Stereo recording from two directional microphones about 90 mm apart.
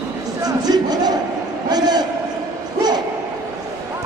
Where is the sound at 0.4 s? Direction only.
45° right (ahead or behind).